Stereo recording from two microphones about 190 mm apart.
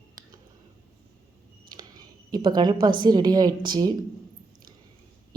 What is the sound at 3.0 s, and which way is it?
Speech, 20° right (ahead or behind).